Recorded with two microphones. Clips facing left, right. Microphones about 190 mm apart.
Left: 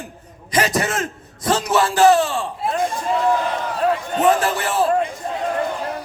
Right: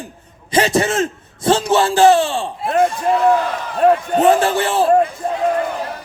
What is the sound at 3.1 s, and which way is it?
Speech, 65° right (ahead or behind).